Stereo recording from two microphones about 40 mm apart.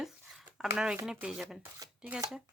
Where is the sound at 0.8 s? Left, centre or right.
Centre.